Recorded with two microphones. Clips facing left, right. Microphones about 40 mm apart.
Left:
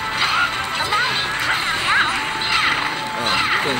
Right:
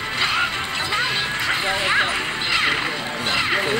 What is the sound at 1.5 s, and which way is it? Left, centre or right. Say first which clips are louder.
Music: left 2 dB; centre.